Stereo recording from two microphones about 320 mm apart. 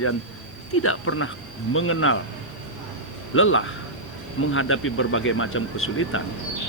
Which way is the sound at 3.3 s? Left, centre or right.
Left.